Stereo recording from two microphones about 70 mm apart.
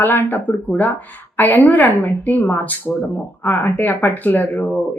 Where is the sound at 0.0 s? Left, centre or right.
Left.